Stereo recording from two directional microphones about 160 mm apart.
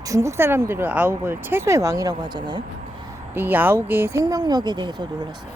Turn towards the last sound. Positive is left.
turn(degrees=-25)  # may be behind; listen again after turning